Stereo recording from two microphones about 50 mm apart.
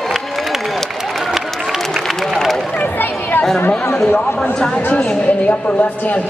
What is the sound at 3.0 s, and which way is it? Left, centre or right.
Chatter, left.